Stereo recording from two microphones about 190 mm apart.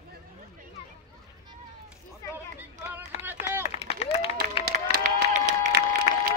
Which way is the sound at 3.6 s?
30° left (ahead or behind).